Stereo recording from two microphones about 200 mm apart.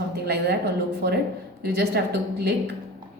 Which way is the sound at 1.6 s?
55° right (ahead or behind).